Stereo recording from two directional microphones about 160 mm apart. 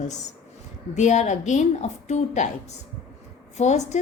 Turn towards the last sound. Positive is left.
turn(degrees=45)  # may be behind; listen again after turning